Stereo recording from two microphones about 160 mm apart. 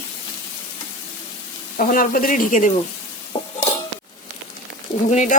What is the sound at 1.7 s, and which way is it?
Speech, 60° left (ahead or behind).